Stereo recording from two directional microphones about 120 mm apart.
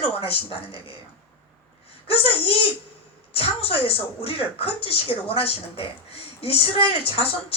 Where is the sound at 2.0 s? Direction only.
50° left (ahead or behind).